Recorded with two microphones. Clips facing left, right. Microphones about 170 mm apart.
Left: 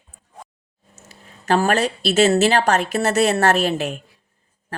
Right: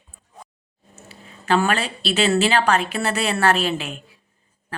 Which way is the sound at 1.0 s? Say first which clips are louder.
Left 1 dB; 45° left (ahead or behind).